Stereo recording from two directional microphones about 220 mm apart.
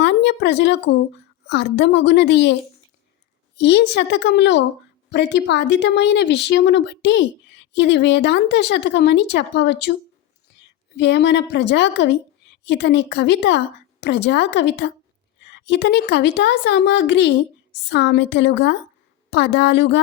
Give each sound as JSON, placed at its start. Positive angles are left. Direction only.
{"t": 0.0, "sound": "a woman's voice", "side_deg": 50}
{"t": 3.6, "sound": "speech", "side_deg": 50}
{"t": 10.9, "sound": "speech", "side_deg": 50}